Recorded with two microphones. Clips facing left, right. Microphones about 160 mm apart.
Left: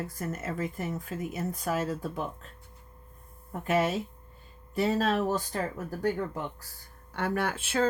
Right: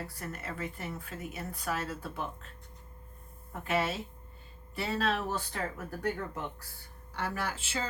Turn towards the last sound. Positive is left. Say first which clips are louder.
# left 7 dB
turn(degrees=55)  # may be behind; listen again after turning